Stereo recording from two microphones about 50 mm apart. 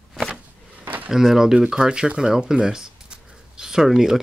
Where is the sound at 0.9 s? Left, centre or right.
Right.